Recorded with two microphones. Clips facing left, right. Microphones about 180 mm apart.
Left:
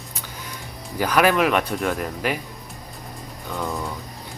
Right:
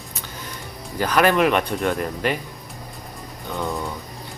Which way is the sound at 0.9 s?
10° left (ahead or behind).